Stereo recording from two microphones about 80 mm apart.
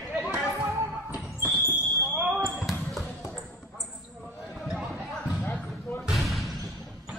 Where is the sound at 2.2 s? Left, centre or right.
Centre.